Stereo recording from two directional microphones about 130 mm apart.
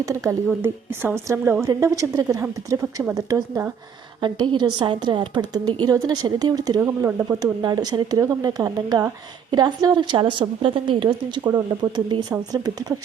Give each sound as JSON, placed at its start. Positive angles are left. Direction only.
{"t": 0.0, "sound": "a woman's voice", "side_deg": -20}
{"t": 3.2, "sound": "a woman's voice", "side_deg": -25}